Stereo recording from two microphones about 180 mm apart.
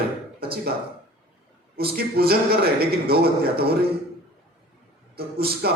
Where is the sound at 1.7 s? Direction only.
60° right (ahead or behind).